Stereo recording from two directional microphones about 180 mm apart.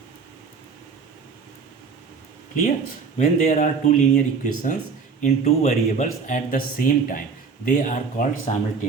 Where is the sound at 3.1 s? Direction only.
40° left (ahead or behind).